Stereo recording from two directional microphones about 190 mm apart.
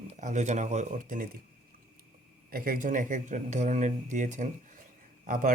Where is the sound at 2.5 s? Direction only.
50° right (ahead or behind).